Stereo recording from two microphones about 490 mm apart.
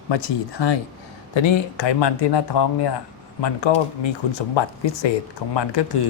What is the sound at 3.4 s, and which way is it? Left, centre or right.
Speech, left.